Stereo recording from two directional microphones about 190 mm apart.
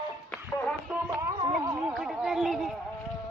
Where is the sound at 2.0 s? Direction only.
Centre (ahead or behind).